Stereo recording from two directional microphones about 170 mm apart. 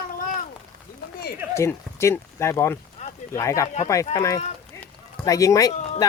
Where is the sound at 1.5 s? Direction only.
15° left (ahead or behind).